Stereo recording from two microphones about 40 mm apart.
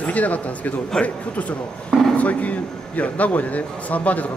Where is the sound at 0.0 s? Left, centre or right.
Left.